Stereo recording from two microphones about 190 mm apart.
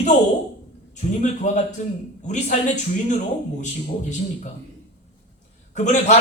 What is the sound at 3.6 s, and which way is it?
Speech, 40° left (ahead or behind).